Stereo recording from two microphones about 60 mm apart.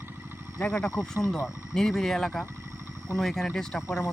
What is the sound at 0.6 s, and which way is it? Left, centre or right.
Speech, centre.